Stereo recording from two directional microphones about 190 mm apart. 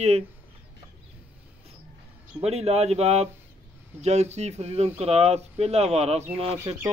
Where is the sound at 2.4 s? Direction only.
35° right (ahead or behind).